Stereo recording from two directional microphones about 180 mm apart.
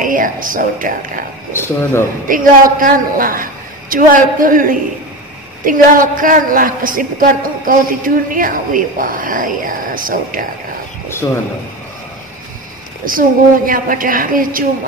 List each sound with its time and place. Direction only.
0.0 s a woman's voice: 50° right (ahead or behind)
1.5 s speech: 15° left (ahead or behind)
2.2 s a woman's voice: 50° right (ahead or behind)
13.0 s a woman's voice: 50° right (ahead or behind)